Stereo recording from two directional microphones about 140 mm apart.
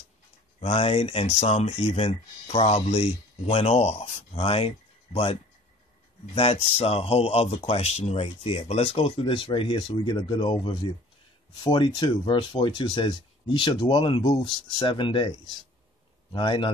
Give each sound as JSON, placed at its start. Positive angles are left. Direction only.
{"t": 0.6, "sound": "speech", "side_deg": 45}